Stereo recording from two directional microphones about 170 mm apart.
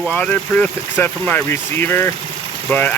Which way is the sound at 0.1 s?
10° left (ahead or behind).